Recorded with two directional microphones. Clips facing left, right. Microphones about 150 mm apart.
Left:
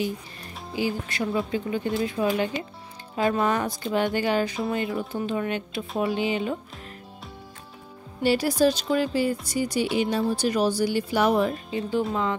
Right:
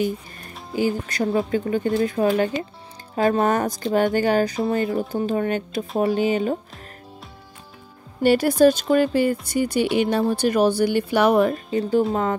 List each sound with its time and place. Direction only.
0.7 s speech: 45° right (ahead or behind)
8.2 s speech: 55° right (ahead or behind)